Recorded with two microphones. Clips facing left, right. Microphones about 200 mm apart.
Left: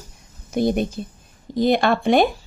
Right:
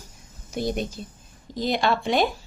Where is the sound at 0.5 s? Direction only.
55° left (ahead or behind).